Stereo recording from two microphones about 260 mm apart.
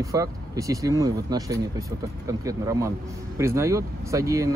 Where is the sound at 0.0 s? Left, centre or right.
Centre.